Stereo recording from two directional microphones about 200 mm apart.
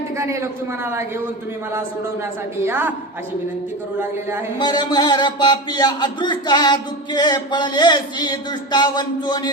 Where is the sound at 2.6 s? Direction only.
10° right (ahead or behind).